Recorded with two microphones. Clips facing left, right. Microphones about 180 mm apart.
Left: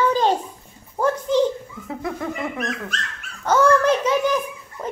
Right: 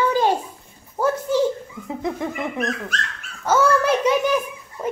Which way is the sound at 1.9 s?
20° right (ahead or behind).